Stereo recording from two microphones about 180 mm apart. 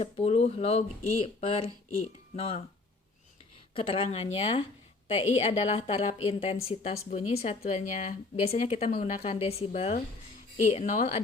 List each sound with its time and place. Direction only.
0.0 s speech: 35° left (ahead or behind)
3.8 s speech: 30° left (ahead or behind)